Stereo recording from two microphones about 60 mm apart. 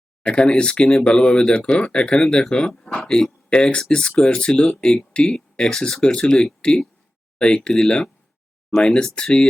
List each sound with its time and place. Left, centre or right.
0.2 s speech: centre